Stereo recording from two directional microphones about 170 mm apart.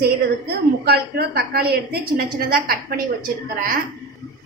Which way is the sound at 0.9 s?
65° right (ahead or behind).